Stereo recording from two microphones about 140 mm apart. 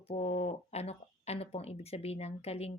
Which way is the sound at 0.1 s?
45° left (ahead or behind).